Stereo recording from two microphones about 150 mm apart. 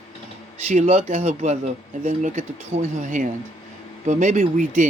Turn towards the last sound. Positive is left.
turn(degrees=-55)  # may be behind; listen again after turning